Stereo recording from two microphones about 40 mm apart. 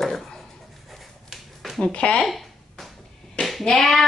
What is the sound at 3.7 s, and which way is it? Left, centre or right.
Speech, centre.